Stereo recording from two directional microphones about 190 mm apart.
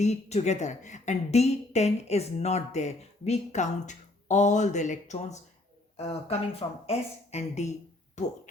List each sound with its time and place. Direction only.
0.0 s a woman's voice: 35° left (ahead or behind)